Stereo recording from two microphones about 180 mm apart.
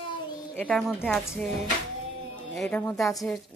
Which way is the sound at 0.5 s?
5° left (ahead or behind).